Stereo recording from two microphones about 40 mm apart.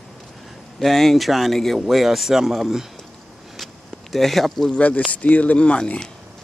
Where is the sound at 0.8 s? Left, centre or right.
Centre.